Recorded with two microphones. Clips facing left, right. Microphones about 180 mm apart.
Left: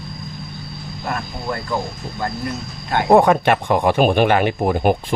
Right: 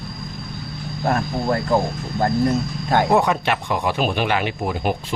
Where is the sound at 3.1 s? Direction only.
50° left (ahead or behind).